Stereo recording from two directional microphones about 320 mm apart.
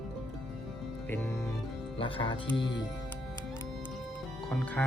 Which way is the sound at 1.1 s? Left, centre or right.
Centre.